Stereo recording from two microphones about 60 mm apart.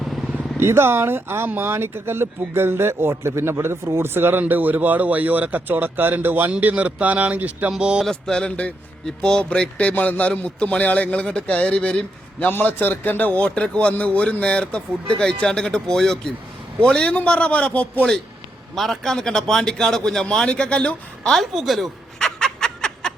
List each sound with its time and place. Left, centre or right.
0.0 s vehicle: centre
0.6 s speech: right
6.5 s speech: right
7.8 s a sound: centre
8.0 s a man's voice: centre
12.6 s a man's voice: left
18.7 s a man's voice: centre
21.2 s a woman's voice: centre
22.4 s fowl: centre